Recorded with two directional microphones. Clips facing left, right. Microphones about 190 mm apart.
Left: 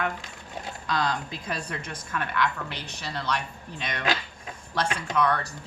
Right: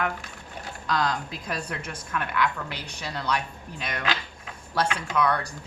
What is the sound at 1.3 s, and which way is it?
A woman's voice, 5° right (ahead or behind).